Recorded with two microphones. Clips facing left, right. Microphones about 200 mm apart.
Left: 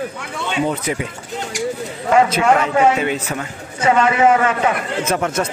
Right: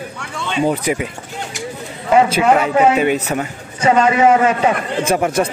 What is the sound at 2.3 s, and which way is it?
Speech, 15° right (ahead or behind).